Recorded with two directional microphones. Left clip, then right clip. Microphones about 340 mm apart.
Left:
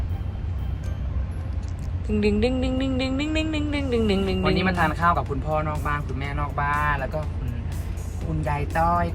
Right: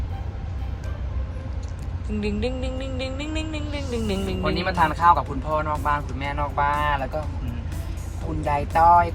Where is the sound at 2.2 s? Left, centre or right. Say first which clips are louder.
Left 5 dB; left.